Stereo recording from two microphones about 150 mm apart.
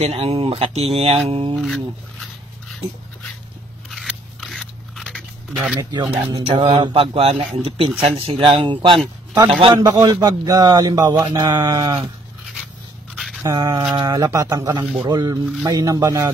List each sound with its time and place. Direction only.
0.0 s speech: 45° right (ahead or behind)
3.9 s scissors: centre (ahead or behind)
5.8 s speech: 25° right (ahead or behind)
6.3 s speech: 35° right (ahead or behind)
9.8 s speech: 25° right (ahead or behind)
13.1 s a sound: centre (ahead or behind)
13.4 s speech: 25° right (ahead or behind)